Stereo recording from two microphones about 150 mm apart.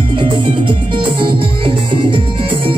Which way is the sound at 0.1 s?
35° right (ahead or behind).